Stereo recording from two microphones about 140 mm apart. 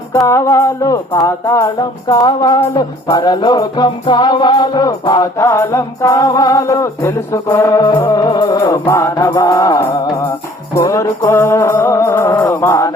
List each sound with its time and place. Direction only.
0.1 s music: 20° left (ahead or behind)